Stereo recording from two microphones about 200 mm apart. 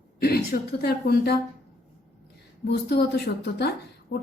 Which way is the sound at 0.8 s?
50° left (ahead or behind).